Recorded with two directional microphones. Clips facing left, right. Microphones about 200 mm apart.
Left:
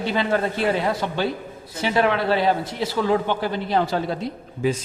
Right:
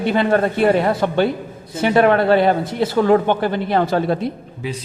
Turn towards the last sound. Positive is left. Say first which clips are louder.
# left 5 dB
turn(degrees=45)  # may be behind; listen again after turning